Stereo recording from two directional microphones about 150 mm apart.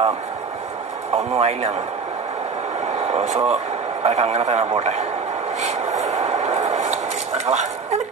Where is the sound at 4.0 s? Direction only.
50° right (ahead or behind).